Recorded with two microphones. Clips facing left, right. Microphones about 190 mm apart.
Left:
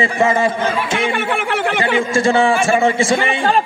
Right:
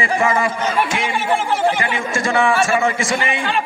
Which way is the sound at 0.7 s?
65° left (ahead or behind).